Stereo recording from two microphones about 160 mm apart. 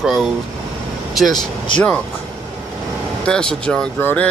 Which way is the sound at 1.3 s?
25° left (ahead or behind).